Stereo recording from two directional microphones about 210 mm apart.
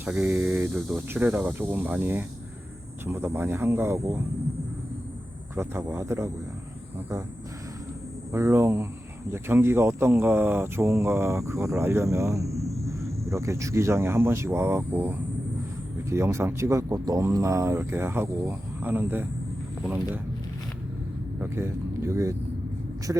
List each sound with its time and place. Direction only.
0.0 s speech: 5° right (ahead or behind)
5.5 s speech: 10° right (ahead or behind)
8.3 s speech: 15° right (ahead or behind)
21.4 s speech: 10° right (ahead or behind)